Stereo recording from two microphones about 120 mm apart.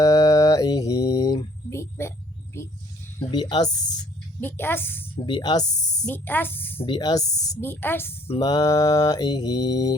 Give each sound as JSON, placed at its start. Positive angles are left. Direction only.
{"t": 0.0, "sound": "mantra", "side_deg": 30}
{"t": 1.7, "sound": "hum", "side_deg": 20}
{"t": 2.5, "sound": "speech", "side_deg": 20}
{"t": 3.3, "sound": "mantra", "side_deg": 35}
{"t": 4.4, "sound": "speech", "side_deg": 15}
{"t": 5.1, "sound": "mantra", "side_deg": 40}
{"t": 6.1, "sound": "speech", "side_deg": 15}
{"t": 6.8, "sound": "mantra", "side_deg": 40}
{"t": 7.6, "sound": "speech", "side_deg": 20}
{"t": 8.4, "sound": "mantra", "side_deg": 35}